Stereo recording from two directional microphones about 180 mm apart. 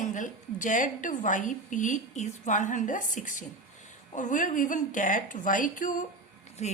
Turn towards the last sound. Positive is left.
turn(degrees=40)  # may be behind; listen again after turning